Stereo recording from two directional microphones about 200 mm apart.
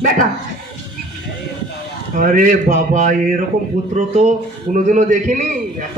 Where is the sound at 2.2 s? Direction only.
40° right (ahead or behind).